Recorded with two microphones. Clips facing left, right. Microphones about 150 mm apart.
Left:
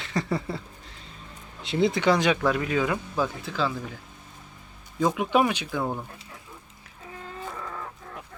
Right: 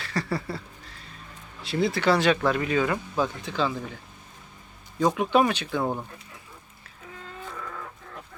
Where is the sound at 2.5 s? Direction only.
5° left (ahead or behind).